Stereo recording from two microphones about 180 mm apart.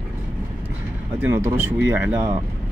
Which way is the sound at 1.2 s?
10° right (ahead or behind).